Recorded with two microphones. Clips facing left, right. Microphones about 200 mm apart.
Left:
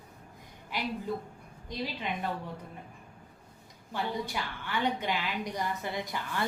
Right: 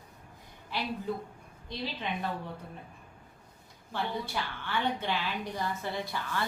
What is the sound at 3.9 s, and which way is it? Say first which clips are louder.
A woman's voice: left 1 dB; 10° left (ahead or behind).